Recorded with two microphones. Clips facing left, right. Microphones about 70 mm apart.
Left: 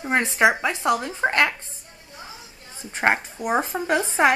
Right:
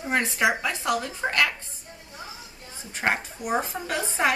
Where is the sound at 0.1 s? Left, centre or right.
Left.